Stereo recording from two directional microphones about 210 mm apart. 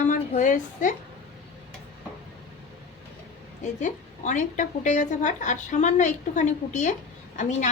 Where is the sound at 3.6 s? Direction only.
35° left (ahead or behind).